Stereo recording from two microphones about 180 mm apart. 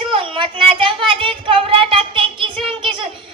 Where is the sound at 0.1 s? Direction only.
30° right (ahead or behind).